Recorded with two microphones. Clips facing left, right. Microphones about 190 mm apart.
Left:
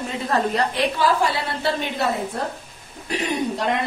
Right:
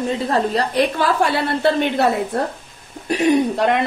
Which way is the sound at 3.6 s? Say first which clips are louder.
Right 6 dB; 70° right (ahead or behind).